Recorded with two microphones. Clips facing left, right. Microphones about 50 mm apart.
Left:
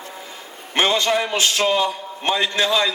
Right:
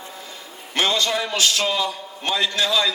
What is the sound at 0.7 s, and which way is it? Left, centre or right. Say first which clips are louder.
A man's voice: left 3 dB; left.